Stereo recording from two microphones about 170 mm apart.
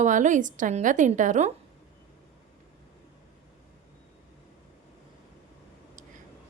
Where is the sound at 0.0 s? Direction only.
45° right (ahead or behind).